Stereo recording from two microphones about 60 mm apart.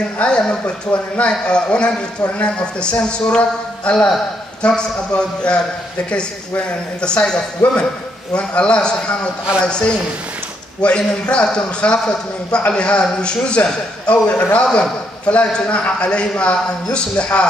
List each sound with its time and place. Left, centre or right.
0.2 s a man's voice: centre
7.0 s a man's voice: centre